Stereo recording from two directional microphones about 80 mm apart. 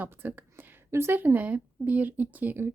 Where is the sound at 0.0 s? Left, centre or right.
Right.